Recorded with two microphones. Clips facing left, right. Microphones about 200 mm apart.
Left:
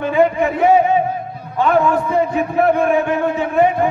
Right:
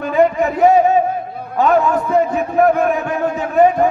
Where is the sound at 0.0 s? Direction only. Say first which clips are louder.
Even; 40° right (ahead or behind).